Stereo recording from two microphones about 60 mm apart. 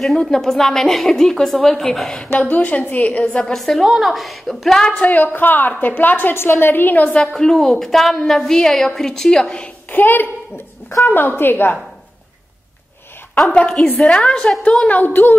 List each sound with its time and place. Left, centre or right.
0.2 s a woman's voice: centre
2.4 s a woman's voice: left
3.5 s a woman's voice: centre
4.7 s a woman's voice: centre
5.0 s a woman's voice: left
7.3 s a woman's voice: centre
9.8 s a woman's voice: left
13.5 s a woman's voice: centre
14.0 s a woman's voice: centre
14.9 s a woman's voice: left